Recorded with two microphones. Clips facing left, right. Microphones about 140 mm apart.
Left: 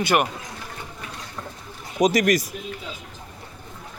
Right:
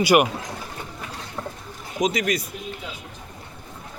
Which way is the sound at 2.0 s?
45° left (ahead or behind).